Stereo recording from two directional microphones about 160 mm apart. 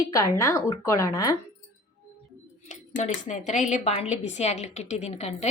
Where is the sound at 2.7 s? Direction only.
45° left (ahead or behind).